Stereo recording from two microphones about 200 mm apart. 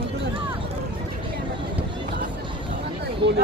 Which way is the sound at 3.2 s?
25° right (ahead or behind).